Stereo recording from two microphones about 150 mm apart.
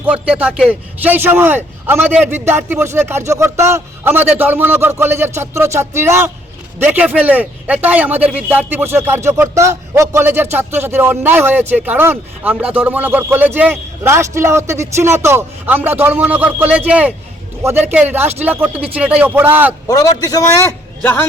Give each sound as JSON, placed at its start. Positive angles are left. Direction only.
{"t": 0.0, "sound": "speech", "side_deg": -10}
{"t": 19.9, "sound": "a man's voice", "side_deg": 25}